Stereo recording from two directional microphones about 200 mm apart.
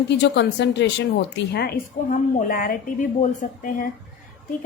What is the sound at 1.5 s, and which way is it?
A woman's voice, 45° left (ahead or behind).